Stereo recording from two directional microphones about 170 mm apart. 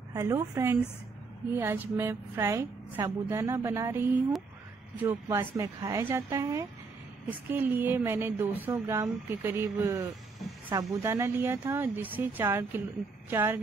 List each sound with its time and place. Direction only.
0.1 s speech: 20° right (ahead or behind)